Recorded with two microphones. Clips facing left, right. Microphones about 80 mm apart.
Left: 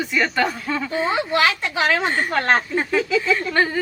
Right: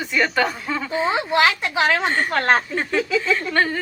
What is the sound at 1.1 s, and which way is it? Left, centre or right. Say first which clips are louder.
Speech: right 1 dB; centre.